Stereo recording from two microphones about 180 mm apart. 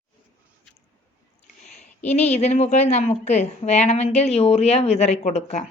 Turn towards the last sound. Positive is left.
turn(degrees=40)  # may be behind; listen again after turning